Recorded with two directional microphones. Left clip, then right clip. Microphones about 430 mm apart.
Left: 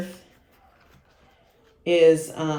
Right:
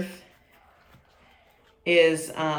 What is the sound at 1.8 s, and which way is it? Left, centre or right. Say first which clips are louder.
Speech: left 3 dB; centre.